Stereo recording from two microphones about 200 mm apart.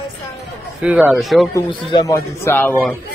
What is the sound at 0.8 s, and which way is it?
Speech, 5° right (ahead or behind).